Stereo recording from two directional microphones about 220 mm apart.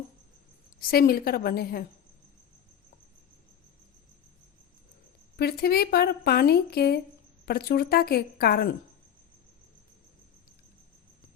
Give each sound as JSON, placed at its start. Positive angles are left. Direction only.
{"t": 0.8, "sound": "a woman's voice", "side_deg": 45}
{"t": 5.4, "sound": "a woman's voice", "side_deg": 45}